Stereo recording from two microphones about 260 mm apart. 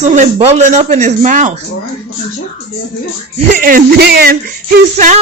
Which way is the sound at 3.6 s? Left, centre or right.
Right.